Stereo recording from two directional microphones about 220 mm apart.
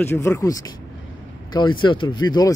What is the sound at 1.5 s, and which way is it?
Speech, 20° left (ahead or behind).